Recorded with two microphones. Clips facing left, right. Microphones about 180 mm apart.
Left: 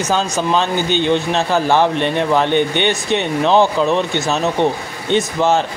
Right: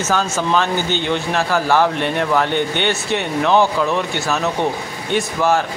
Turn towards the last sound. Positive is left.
turn(degrees=20)  # may be behind; listen again after turning